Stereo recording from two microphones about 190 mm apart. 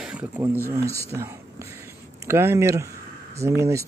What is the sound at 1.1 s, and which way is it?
Speech, 10° right (ahead or behind).